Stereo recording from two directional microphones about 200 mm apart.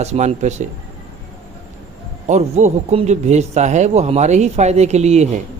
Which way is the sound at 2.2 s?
35° right (ahead or behind).